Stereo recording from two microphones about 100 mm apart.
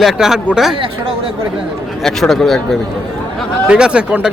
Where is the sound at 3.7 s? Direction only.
10° right (ahead or behind).